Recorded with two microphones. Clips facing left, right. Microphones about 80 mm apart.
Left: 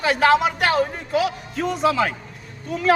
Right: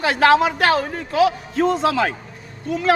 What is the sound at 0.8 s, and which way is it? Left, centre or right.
Speech, right.